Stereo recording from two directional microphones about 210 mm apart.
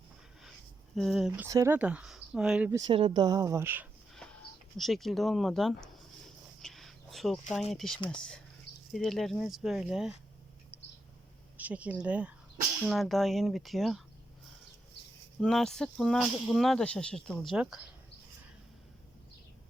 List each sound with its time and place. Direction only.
0.9 s speech: centre (ahead or behind)
1.5 s speech: 15° right (ahead or behind)
2.9 s speech: 25° right (ahead or behind)
4.1 s a sound: 5° left (ahead or behind)
4.8 s speech: centre (ahead or behind)
6.6 s a sound: centre (ahead or behind)
7.7 s speech: centre (ahead or behind)
7.9 s speech: 25° left (ahead or behind)
8.9 s speech: centre (ahead or behind)
11.5 s speech: 5° right (ahead or behind)
15.4 s speech: 5° left (ahead or behind)